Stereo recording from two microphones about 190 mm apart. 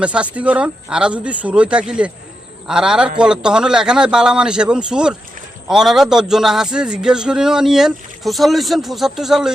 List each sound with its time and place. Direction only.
0.0 s a man's voice: 5° right (ahead or behind)